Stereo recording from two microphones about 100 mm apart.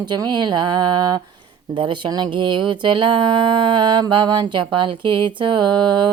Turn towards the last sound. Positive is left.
turn(degrees=-50)  # may be behind; listen again after turning